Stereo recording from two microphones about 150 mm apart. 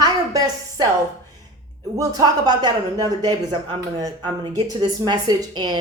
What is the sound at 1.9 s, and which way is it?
A woman's voice, 25° right (ahead or behind).